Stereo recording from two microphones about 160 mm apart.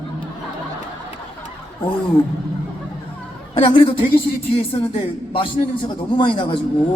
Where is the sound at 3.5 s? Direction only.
30° left (ahead or behind).